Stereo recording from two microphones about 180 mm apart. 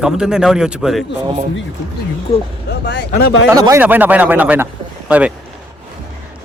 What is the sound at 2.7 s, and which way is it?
Speech, 70° left (ahead or behind).